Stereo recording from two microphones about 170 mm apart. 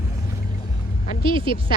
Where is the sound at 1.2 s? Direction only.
30° right (ahead or behind).